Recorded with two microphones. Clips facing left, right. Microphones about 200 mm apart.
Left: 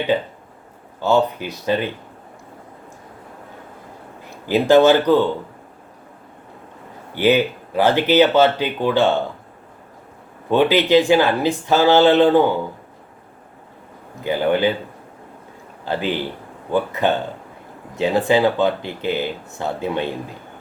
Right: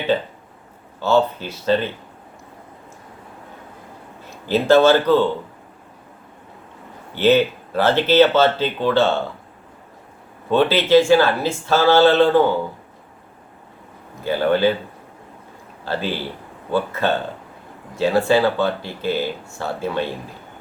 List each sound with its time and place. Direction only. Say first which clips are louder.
0.9 s speech: even; 15° left (ahead or behind)
4.4 s speech: left 1 dB; 15° left (ahead or behind)
7.2 s speech: right 1 dB; 15° left (ahead or behind)
10.5 s speech: even; 15° left (ahead or behind)
14.3 s speech: right 1 dB; 15° left (ahead or behind)
15.8 s a man's voice: left 2 dB; 15° left (ahead or behind)